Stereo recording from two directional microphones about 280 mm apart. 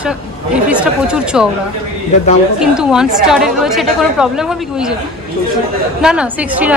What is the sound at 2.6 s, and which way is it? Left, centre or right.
A woman's voice, centre.